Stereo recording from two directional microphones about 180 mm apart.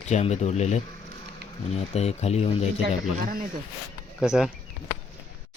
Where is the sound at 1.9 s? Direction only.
35° left (ahead or behind).